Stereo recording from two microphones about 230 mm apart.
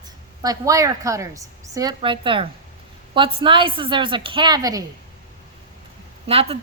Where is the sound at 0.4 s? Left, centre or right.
Centre.